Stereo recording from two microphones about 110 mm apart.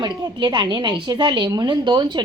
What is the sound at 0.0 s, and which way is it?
A woman's voice, 45° right (ahead or behind).